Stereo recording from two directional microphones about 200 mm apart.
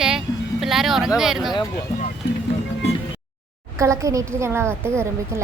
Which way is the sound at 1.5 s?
20° left (ahead or behind).